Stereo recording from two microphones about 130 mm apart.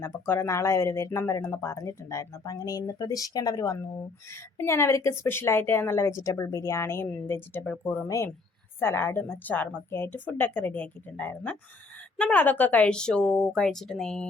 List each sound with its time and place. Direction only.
0.0 s a woman's voice: 20° left (ahead or behind); by 14.3 s 5° left (ahead or behind)